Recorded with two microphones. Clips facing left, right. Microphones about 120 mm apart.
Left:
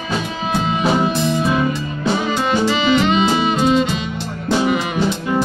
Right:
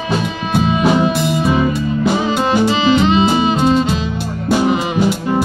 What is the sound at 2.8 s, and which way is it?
Music, 35° right (ahead or behind).